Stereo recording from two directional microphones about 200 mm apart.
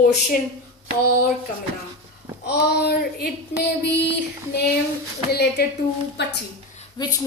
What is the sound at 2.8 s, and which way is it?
Speech, 55° left (ahead or behind).